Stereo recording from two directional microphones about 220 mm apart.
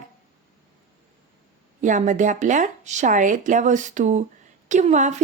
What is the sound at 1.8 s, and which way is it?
A woman's voice, 35° right (ahead or behind).